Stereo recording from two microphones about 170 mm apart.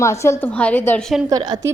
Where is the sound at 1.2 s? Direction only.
25° right (ahead or behind).